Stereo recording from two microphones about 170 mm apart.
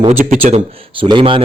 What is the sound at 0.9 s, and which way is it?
Speech, 30° right (ahead or behind).